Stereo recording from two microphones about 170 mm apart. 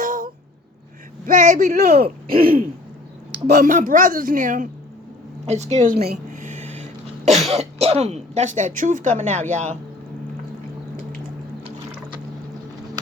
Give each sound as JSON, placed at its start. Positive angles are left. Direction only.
{"t": 0.0, "sound": "a sound", "side_deg": -50}
{"t": 1.3, "sound": "speech", "side_deg": -45}
{"t": 1.7, "sound": "speech", "side_deg": -65}
{"t": 2.2, "sound": "throat clearing", "side_deg": -60}
{"t": 3.4, "sound": "a woman's voice", "side_deg": -45}
{"t": 6.4, "sound": "a sound", "side_deg": -45}
{"t": 7.3, "sound": "cough", "side_deg": 0}
{"t": 7.5, "sound": "speech", "side_deg": -40}